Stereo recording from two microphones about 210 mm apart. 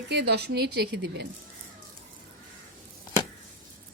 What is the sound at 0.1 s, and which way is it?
A woman's voice, 55° right (ahead or behind).